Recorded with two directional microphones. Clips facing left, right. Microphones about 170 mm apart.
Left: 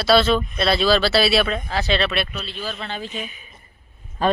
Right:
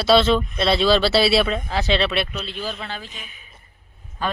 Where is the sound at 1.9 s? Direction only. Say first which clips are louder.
Right 1 dB; 25° right (ahead or behind).